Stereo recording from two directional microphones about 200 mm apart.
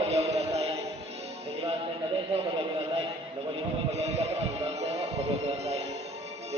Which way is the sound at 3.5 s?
30° right (ahead or behind).